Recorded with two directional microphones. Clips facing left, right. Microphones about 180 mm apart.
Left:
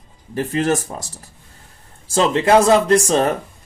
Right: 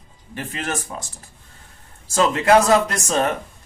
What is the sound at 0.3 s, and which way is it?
Speech, 35° left (ahead or behind).